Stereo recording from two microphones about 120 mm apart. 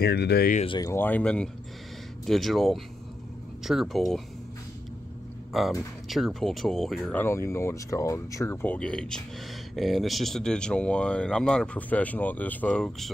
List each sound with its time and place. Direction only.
0.7 s speech: 35° left (ahead or behind)
0.9 s speech: 15° left (ahead or behind)
5.5 s speech: centre (ahead or behind)
7.2 s speech: 20° left (ahead or behind)
8.6 s speech: 10° left (ahead or behind)